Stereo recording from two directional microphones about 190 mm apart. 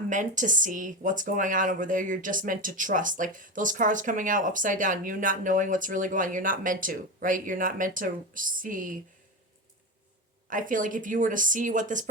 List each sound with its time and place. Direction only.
0.1 s speech: 40° right (ahead or behind)
10.5 s speech: 45° right (ahead or behind)